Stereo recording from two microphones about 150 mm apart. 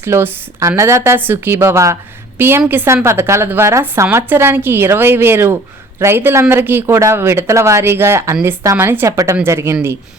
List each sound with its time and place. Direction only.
0.0 s speech: 15° right (ahead or behind)